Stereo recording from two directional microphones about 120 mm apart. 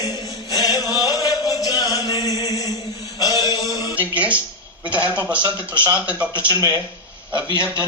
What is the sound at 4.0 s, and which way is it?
Music, 10° right (ahead or behind).